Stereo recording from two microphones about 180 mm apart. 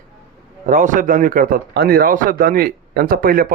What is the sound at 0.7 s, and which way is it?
Speech, 45° right (ahead or behind).